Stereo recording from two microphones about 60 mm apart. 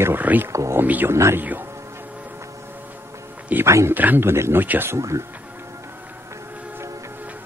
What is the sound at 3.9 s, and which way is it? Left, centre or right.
Speech, right.